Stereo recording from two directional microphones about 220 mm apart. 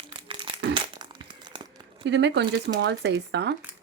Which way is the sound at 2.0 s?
55° right (ahead or behind).